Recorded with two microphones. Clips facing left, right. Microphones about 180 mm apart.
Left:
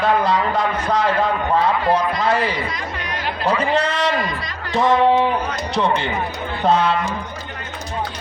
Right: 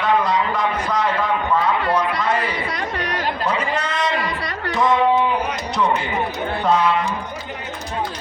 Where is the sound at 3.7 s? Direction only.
30° left (ahead or behind).